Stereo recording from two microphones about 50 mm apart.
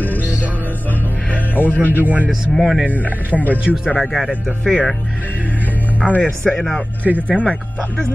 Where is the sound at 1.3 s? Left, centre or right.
Left.